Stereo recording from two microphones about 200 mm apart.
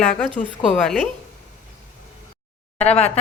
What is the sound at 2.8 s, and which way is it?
Speech, 30° left (ahead or behind).